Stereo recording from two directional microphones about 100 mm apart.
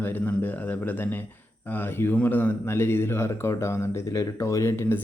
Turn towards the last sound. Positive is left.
turn(degrees=25)  # may be behind; listen again after turning